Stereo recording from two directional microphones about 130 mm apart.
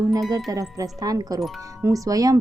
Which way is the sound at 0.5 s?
25° right (ahead or behind).